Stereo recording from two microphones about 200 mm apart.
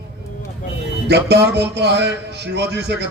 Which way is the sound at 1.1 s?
55° right (ahead or behind).